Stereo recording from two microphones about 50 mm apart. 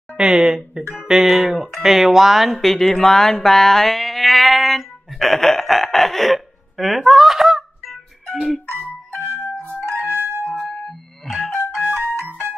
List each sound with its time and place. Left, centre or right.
0.2 s speech: centre
9.8 s music: right
10.5 s music: left
11.2 s music: centre
11.5 s music: left